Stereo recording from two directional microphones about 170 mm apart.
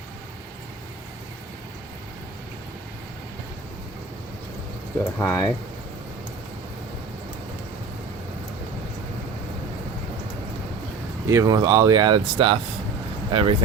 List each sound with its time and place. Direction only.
5.2 s speech: 15° left (ahead or behind)
11.3 s speech: 20° right (ahead or behind)